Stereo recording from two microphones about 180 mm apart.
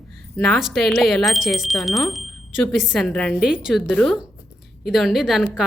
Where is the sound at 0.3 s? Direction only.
Centre (ahead or behind).